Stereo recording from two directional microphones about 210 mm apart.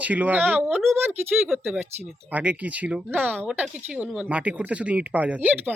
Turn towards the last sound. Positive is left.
turn(degrees=-5)  # may be behind; listen again after turning